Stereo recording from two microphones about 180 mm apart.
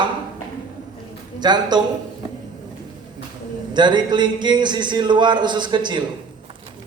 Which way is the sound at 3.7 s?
25° right (ahead or behind).